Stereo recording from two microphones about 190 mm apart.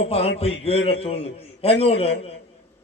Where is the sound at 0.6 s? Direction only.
30° left (ahead or behind).